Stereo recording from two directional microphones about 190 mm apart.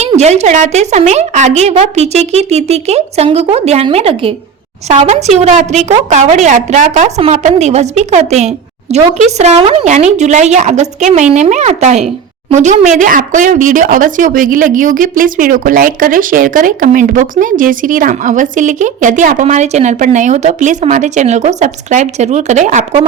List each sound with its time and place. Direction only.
0.0 s a woman's voice: 35° right (ahead or behind)